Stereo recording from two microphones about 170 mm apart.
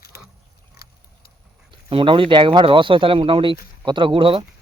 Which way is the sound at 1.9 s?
30° right (ahead or behind).